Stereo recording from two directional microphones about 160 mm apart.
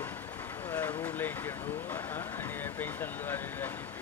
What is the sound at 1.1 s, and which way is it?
Speech, 10° left (ahead or behind).